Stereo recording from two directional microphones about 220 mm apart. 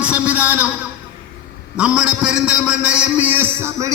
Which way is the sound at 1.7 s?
5° right (ahead or behind).